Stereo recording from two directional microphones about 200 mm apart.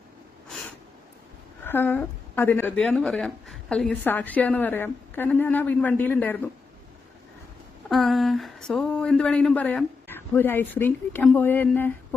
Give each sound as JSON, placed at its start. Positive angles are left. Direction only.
{"t": 1.6, "sound": "a woman's voice", "side_deg": 10}
{"t": 7.9, "sound": "speech", "side_deg": 0}